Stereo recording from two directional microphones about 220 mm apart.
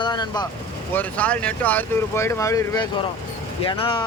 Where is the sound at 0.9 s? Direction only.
5° left (ahead or behind).